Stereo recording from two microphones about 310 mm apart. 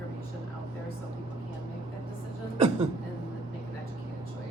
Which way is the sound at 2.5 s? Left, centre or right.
Centre.